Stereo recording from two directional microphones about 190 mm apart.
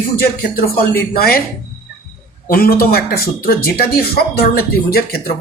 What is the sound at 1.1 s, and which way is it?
Speech, 50° left (ahead or behind).